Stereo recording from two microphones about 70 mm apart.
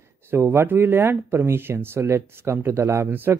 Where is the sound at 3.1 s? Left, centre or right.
Right.